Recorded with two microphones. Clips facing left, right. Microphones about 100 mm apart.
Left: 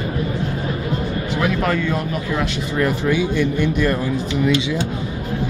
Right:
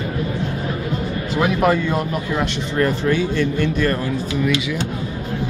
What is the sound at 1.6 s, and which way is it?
Speech, 15° right (ahead or behind).